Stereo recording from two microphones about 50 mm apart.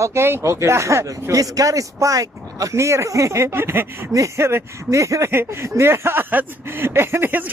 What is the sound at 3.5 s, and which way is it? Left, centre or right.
Speech, right.